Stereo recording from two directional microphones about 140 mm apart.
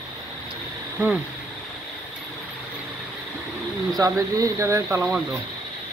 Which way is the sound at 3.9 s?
25° right (ahead or behind).